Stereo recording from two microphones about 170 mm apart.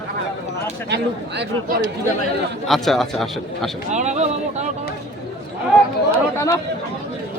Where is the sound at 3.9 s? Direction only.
45° right (ahead or behind).